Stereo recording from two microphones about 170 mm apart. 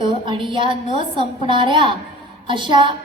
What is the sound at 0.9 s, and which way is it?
A woman's voice, 30° right (ahead or behind).